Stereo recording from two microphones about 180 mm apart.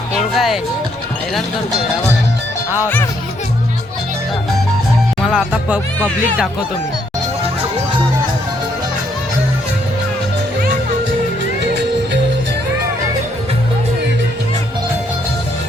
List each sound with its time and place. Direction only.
0.3 s speech: centre (ahead or behind)
2.8 s speech: 15° left (ahead or behind)
5.2 s speech: 5° right (ahead or behind)